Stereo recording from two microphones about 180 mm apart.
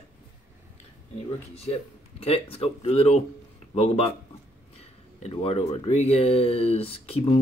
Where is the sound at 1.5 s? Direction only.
35° left (ahead or behind).